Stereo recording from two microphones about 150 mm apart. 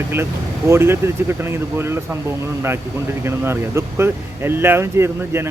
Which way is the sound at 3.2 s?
15° right (ahead or behind).